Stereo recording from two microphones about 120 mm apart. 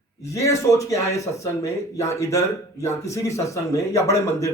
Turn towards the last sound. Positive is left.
turn(degrees=25)  # may be behind; listen again after turning